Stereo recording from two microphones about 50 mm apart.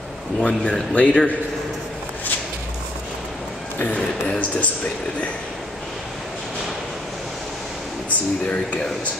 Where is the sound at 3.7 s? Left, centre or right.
Left.